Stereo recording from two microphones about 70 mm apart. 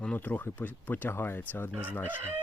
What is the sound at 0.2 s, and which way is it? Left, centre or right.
Speech, left.